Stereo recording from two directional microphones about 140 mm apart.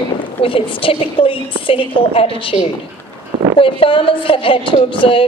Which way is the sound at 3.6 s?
40° left (ahead or behind).